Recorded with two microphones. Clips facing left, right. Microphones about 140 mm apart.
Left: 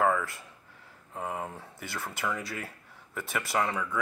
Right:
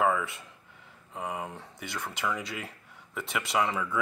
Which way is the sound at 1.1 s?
Centre (ahead or behind).